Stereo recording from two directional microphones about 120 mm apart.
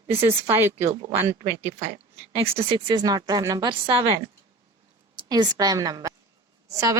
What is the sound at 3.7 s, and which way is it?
Speech, 45° right (ahead or behind).